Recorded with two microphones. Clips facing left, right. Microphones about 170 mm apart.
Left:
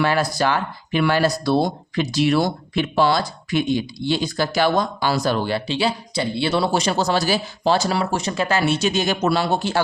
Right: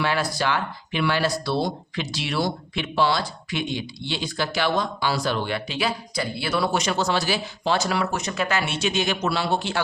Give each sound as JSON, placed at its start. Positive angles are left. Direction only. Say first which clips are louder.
{"t": 0.0, "sound": "speech", "louder": "left 5 dB", "side_deg": 45}